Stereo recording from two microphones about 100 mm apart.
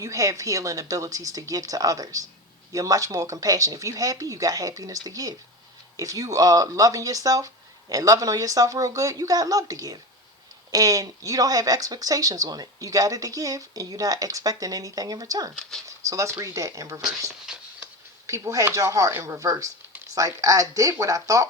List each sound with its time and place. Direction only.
0.0 s speech: 35° right (ahead or behind)
18.3 s speech: 30° right (ahead or behind)